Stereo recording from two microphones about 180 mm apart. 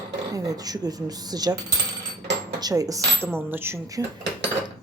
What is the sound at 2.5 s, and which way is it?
Speech, 20° right (ahead or behind).